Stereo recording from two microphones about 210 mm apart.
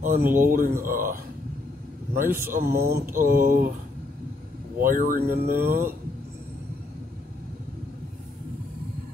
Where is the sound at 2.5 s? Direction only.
45° right (ahead or behind).